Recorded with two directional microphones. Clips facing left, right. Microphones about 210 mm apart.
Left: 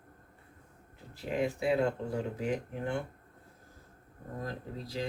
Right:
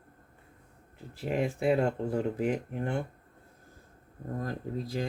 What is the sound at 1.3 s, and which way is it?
Speech, 50° right (ahead or behind).